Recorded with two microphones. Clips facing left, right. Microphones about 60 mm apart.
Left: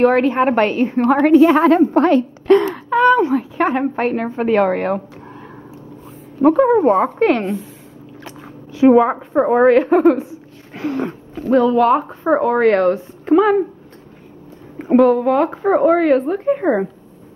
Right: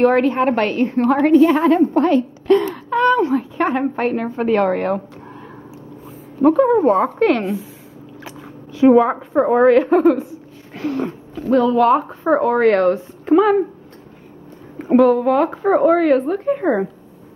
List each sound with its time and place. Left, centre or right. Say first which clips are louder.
0.0 s a woman's voice: left 1 dB; centre
0.3 s speech: left 2 dB; left
0.7 s a woman's voice: left 1 dB; centre
1.3 s a woman's voice: left 2 dB; left
2.7 s a woman's voice: left 3 dB; centre
6.4 s a woman's voice: left 1 dB; centre
8.7 s a woman's voice: left 1 dB; centre
10.7 s a sound: left 1 dB; left
11.5 s speech: left 1 dB; centre
14.8 s a woman's voice: left 1 dB; centre